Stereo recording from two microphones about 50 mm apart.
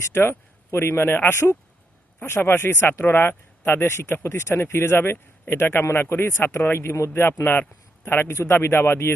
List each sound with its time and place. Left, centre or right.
0.1 s speech: left
1.3 s speech: left
2.2 s speech: left